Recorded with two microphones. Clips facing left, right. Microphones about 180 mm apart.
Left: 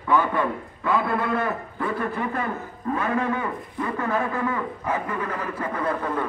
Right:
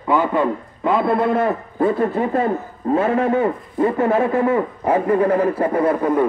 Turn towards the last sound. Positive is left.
turn(degrees=-25)  # may be behind; listen again after turning